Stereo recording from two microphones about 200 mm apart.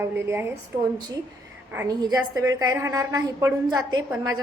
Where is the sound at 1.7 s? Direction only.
15° right (ahead or behind).